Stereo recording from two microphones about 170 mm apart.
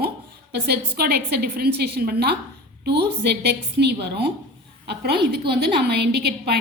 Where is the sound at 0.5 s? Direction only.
70° right (ahead or behind).